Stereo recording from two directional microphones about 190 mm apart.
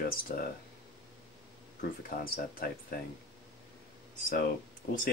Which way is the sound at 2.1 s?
50° left (ahead or behind).